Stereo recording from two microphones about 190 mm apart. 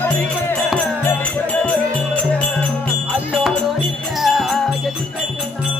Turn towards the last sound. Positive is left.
turn(degrees=0)  # may be behind; listen again after turning